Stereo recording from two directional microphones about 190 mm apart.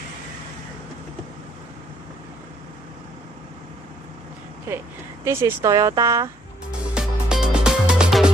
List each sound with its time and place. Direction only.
5.2 s speech: 15° right (ahead or behind)
6.7 s music: 5° right (ahead or behind)